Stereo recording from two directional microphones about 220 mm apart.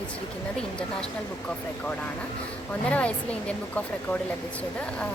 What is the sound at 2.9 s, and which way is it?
A woman's voice, 5° left (ahead or behind).